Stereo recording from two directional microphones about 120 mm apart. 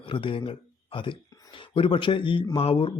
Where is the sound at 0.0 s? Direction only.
45° left (ahead or behind).